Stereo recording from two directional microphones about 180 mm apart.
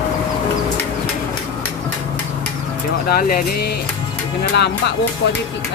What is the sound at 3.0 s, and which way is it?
Speech, 50° left (ahead or behind).